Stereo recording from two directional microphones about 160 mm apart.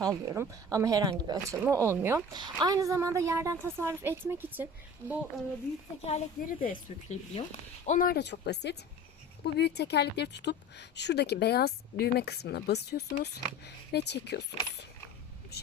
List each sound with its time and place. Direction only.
0.0 s a woman's voice: 20° right (ahead or behind)
2.3 s a woman's voice: 25° right (ahead or behind); by 5.2 s 10° right (ahead or behind)
6.4 s speech: 60° left (ahead or behind); by 14.4 s 90° left